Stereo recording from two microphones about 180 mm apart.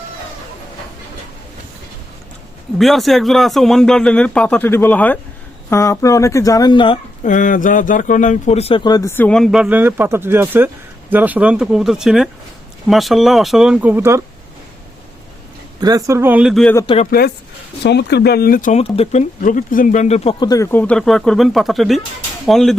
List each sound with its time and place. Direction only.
2.7 s speech: centre (ahead or behind); by 7.0 s 25° left (ahead or behind)
7.3 s speech: 45° left (ahead or behind); by 14.2 s 10° right (ahead or behind)
15.8 s speech: 20° right (ahead or behind); by 16.7 s centre (ahead or behind)
16.8 s speech: 30° left (ahead or behind)
17.1 s speech: 60° left (ahead or behind)
18.8 s speech: 35° left (ahead or behind)
19.4 s speech: 50° left (ahead or behind)
20.5 s speech: 15° left (ahead or behind)